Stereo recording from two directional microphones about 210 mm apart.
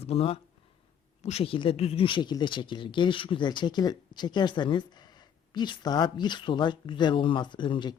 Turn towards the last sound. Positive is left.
turn(degrees=20)  # may be behind; listen again after turning